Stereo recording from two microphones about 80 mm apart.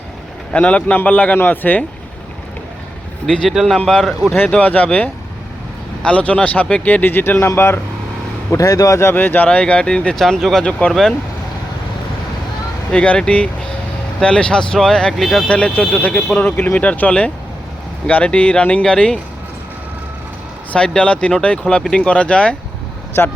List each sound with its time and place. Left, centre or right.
0.5 s speech: centre
3.2 s speech: centre
4.4 s speech: centre
8.5 s speech: left
9.0 s speech: left
12.9 s speech: centre
15.4 s speech: centre
20.7 s speech: centre
23.2 s speech: left